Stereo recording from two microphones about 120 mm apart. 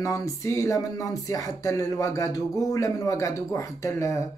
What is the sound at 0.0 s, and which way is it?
Speech, 25° left (ahead or behind).